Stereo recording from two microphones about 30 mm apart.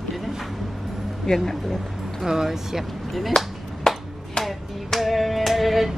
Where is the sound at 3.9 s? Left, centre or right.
Centre.